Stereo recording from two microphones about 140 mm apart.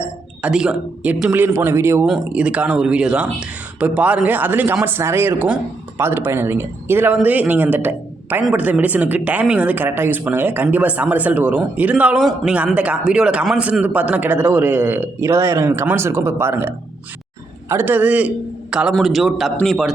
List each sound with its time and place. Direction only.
0.4 s speech: 5° right (ahead or behind)
2.0 s a man's voice: 5° right (ahead or behind)